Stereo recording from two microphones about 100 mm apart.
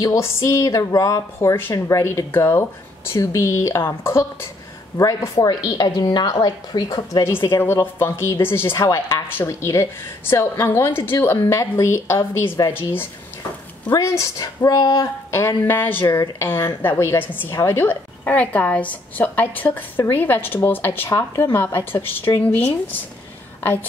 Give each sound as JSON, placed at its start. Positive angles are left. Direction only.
{"t": 0.0, "sound": "a woman's voice", "side_deg": 35}
{"t": 5.8, "sound": "a woman's voice", "side_deg": 45}
{"t": 7.5, "sound": "a woman's voice", "side_deg": 25}
{"t": 14.0, "sound": "a woman's voice", "side_deg": 35}
{"t": 15.3, "sound": "a woman's voice", "side_deg": 25}